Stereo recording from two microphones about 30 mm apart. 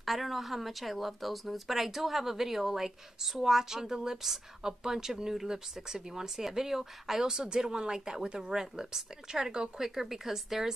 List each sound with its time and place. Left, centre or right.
0.0 s a woman's voice: centre; by 9.7 s right
9.8 s a woman's voice: centre